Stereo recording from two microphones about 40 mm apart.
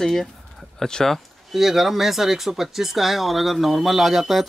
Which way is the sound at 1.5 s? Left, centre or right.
Centre.